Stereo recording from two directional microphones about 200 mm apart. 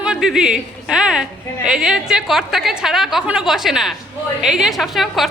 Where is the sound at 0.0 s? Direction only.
5° right (ahead or behind).